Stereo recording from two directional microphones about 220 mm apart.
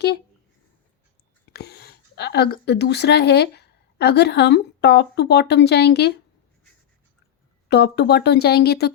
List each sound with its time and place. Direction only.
1.5 s speech: 45° left (ahead or behind)
7.7 s speech: 50° left (ahead or behind)